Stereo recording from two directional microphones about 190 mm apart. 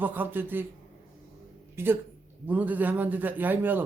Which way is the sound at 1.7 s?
10° right (ahead or behind).